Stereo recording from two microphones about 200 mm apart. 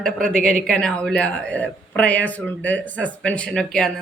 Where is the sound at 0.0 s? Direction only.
5° left (ahead or behind).